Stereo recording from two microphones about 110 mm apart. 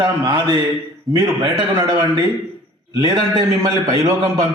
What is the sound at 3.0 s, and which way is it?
A man's voice, 40° right (ahead or behind).